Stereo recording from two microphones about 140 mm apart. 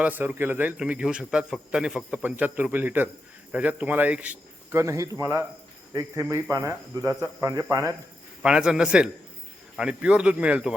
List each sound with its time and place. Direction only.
0.0 s a man's voice: 10° right (ahead or behind)
8.4 s a man's voice: 5° right (ahead or behind)